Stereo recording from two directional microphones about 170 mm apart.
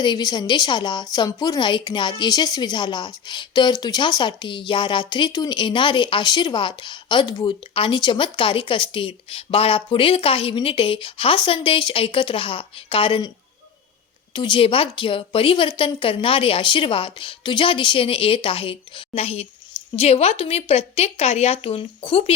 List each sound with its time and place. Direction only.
0.0 s a woman's voice: 25° left (ahead or behind)
14.3 s a woman's voice: 30° left (ahead or behind)